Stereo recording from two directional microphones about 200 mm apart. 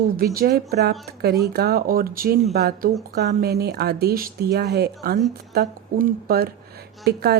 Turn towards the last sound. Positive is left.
turn(degrees=-55)  # may be behind; listen again after turning